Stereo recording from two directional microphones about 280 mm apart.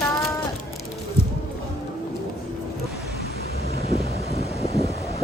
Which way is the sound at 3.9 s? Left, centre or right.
Left.